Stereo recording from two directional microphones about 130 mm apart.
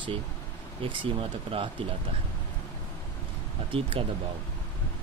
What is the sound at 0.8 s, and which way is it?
Speech, 40° right (ahead or behind).